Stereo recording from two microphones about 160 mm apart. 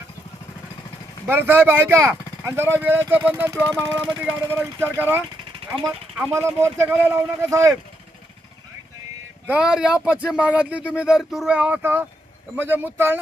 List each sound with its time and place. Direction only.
1.3 s speech: 15° right (ahead or behind)
9.5 s speech: 5° right (ahead or behind)